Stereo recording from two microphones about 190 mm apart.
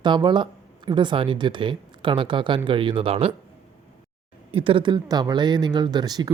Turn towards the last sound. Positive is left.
turn(degrees=-20)  # may be behind; listen again after turning